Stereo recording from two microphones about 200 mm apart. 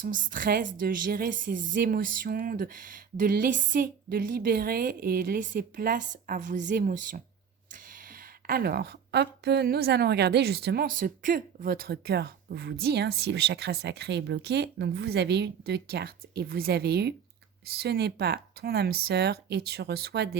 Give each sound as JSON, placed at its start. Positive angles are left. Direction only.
{"t": 0.0, "sound": "speech", "side_deg": -40}